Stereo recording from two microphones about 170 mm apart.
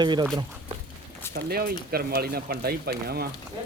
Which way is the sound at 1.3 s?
60° right (ahead or behind).